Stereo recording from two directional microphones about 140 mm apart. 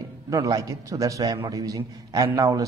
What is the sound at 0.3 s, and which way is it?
A man's voice, 25° right (ahead or behind).